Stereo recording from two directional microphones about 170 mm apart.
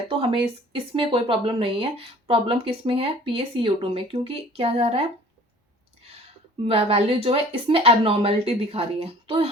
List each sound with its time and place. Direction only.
0.1 s speech: 30° right (ahead or behind)
6.0 s a sound: 35° right (ahead or behind)
6.7 s speech: 35° right (ahead or behind)